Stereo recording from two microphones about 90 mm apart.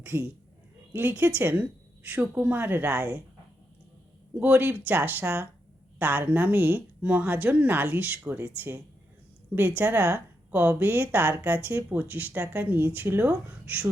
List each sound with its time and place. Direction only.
0.0 s a woman's voice: 25° right (ahead or behind)
4.4 s a woman's voice: 20° right (ahead or behind)